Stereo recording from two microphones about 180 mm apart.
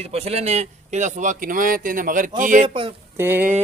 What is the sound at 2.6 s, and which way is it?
Speech, 30° right (ahead or behind).